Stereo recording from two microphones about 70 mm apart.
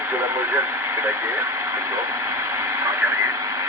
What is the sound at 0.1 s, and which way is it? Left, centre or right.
Speech, right.